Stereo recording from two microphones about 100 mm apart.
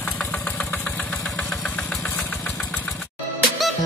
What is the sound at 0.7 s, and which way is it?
Engine, 15° left (ahead or behind).